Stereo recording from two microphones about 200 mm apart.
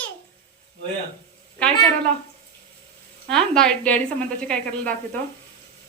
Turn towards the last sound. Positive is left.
turn(degrees=5)  # may be behind; listen again after turning